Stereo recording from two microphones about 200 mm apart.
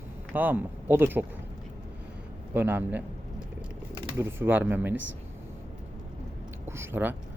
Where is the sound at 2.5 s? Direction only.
10° right (ahead or behind).